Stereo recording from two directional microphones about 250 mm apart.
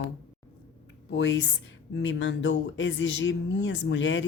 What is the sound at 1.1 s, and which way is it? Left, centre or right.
A woman's voice, left.